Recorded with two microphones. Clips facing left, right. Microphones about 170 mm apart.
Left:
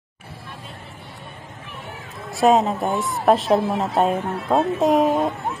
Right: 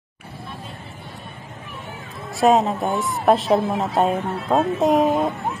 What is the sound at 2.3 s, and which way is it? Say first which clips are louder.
A woman's voice: even; centre (ahead or behind).